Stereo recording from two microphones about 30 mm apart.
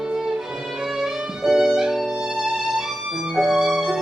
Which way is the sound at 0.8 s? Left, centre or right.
Centre.